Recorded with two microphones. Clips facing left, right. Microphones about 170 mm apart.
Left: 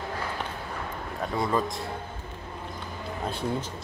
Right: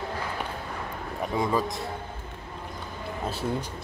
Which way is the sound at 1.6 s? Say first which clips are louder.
Right 1 dB; centre (ahead or behind).